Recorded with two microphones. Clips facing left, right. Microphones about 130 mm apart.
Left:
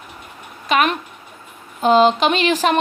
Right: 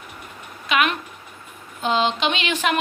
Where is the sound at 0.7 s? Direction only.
40° left (ahead or behind).